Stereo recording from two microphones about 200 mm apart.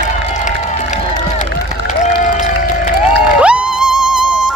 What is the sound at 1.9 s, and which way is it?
Music, 40° left (ahead or behind).